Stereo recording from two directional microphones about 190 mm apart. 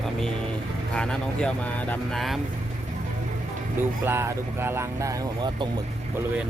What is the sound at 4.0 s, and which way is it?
Speech, 10° right (ahead or behind).